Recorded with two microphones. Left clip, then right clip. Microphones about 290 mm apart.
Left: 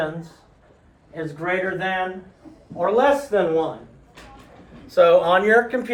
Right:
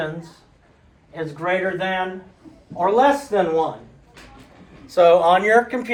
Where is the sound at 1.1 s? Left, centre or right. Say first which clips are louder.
Right 2 dB; centre.